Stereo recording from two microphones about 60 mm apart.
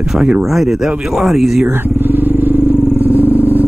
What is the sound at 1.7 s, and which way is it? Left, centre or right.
Vehicle, right.